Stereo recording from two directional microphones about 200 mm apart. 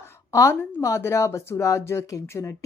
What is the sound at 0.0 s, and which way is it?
Speech, 15° left (ahead or behind).